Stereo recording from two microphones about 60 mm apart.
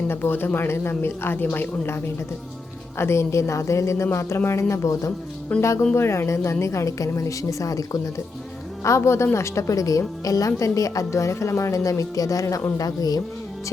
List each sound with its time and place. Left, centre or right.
0.1 s a woman's voice: left
3.0 s a woman's voice: left
5.5 s speech: left
5.9 s speech: left
8.8 s a woman's voice: left
12.7 s speech: left